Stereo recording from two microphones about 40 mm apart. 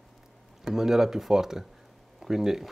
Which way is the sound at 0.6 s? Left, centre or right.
Centre.